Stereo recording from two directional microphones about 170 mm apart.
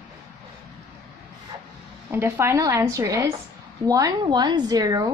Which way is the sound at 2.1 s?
15° right (ahead or behind).